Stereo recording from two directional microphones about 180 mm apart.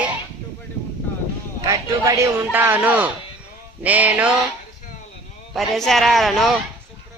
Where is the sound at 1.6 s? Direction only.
15° right (ahead or behind).